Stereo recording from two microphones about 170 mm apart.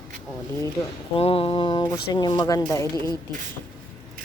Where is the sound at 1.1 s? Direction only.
35° left (ahead or behind).